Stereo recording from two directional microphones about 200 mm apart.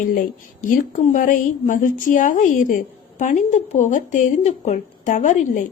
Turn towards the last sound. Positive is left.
turn(degrees=40)  # may be behind; listen again after turning